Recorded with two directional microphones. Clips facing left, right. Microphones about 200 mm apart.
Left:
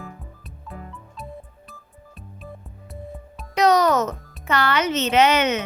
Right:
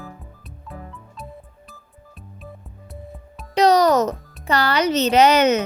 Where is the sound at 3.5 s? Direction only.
35° right (ahead or behind).